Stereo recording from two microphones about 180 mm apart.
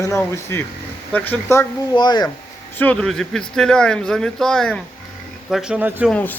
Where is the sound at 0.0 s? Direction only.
15° left (ahead or behind).